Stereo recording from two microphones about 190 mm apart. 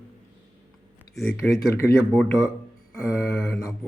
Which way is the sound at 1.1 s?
Centre (ahead or behind).